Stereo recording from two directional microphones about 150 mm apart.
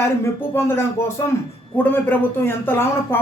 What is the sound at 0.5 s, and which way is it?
A man's voice, 15° left (ahead or behind).